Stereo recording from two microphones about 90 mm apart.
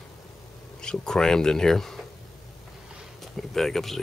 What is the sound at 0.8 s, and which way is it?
Speech, 10° left (ahead or behind).